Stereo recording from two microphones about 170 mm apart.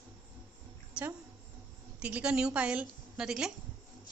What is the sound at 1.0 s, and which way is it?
A woman's voice, 5° right (ahead or behind).